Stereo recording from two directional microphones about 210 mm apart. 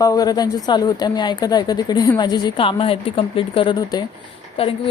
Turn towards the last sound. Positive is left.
turn(degrees=25)  # may be behind; listen again after turning